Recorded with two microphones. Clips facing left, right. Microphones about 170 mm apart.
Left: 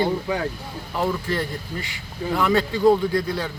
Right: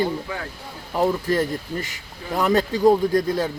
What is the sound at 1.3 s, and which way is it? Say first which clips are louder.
Speech: right 4 dB; 40° right (ahead or behind).